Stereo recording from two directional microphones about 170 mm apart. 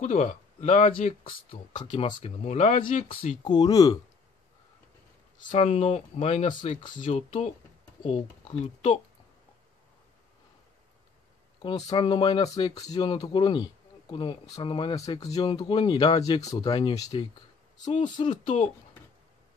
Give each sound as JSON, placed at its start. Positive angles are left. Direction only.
{"t": 0.0, "sound": "speech", "side_deg": 40}
{"t": 5.4, "sound": "speech", "side_deg": 30}
{"t": 11.9, "sound": "speech", "side_deg": 25}